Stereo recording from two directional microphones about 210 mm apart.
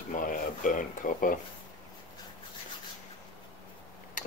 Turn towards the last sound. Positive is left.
turn(degrees=40)  # may be behind; listen again after turning